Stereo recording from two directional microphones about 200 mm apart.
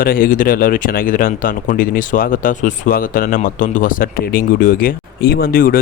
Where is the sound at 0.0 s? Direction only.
45° left (ahead or behind).